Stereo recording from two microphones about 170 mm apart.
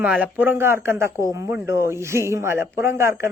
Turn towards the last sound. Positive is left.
turn(degrees=-15)  # may be behind; listen again after turning